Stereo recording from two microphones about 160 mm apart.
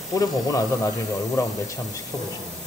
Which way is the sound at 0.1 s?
20° left (ahead or behind).